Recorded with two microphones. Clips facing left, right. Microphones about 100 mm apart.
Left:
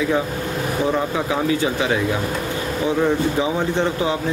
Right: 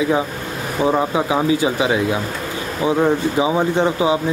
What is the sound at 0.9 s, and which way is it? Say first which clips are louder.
Speech: right 3 dB; 15° right (ahead or behind).